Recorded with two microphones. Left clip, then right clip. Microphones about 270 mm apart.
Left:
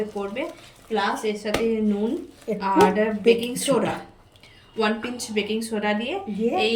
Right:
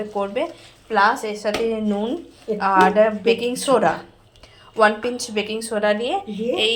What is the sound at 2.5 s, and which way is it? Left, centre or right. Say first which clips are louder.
Speech: right 4 dB; left.